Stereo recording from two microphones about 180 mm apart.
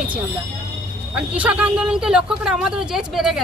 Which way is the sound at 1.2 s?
5° right (ahead or behind).